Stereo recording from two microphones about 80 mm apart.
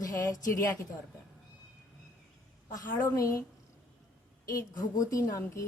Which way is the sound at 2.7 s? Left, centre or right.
Left.